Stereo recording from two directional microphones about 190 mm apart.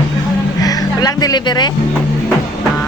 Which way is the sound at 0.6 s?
20° left (ahead or behind).